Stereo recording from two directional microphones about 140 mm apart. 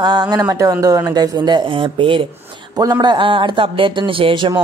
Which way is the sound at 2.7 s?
25° right (ahead or behind).